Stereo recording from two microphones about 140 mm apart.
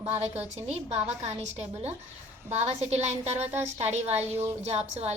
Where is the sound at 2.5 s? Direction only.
50° right (ahead or behind).